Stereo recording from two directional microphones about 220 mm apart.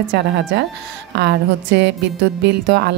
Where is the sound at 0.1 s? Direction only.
50° right (ahead or behind).